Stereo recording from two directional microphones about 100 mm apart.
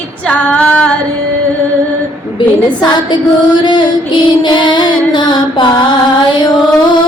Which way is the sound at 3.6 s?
50° left (ahead or behind).